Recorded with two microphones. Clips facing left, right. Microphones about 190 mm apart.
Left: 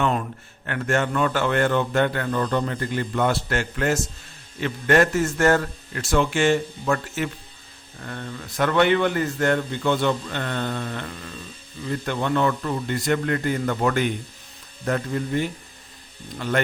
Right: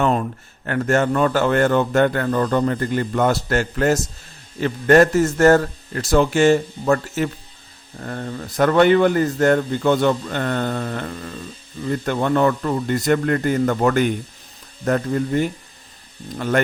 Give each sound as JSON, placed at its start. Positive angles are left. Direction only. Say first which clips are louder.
{"t": 0.0, "sound": "a man's voice", "louder": "right 4 dB", "side_deg": -40}